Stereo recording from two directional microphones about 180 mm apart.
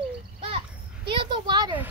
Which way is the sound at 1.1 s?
25° right (ahead or behind).